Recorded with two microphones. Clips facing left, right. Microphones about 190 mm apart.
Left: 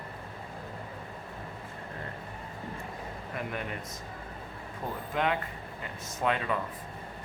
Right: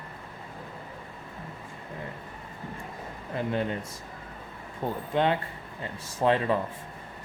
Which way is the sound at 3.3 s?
30° right (ahead or behind).